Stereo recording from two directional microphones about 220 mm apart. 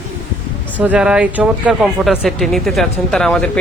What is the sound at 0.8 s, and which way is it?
Speech, 5° right (ahead or behind).